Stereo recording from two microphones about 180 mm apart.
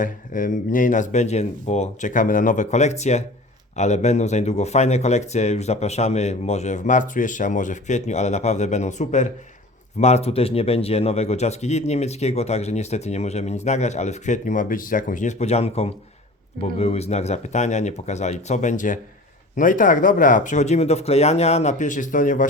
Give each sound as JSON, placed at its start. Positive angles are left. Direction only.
{"t": 0.0, "sound": "speech", "side_deg": 50}